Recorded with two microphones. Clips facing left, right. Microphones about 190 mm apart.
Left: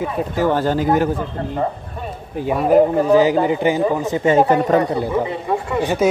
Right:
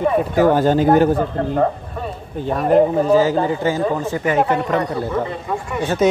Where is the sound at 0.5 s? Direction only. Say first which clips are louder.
Right 2 dB; 15° right (ahead or behind).